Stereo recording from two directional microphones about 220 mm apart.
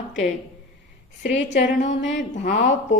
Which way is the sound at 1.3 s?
55° left (ahead or behind).